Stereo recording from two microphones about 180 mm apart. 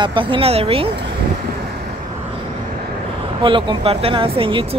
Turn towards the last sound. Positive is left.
turn(degrees=-30)  # may be behind; listen again after turning